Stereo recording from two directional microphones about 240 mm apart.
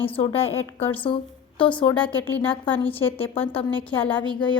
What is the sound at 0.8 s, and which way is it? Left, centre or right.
Speech, centre.